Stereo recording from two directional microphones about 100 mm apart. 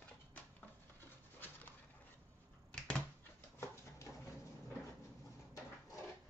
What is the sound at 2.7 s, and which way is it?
Typewriter, 10° left (ahead or behind).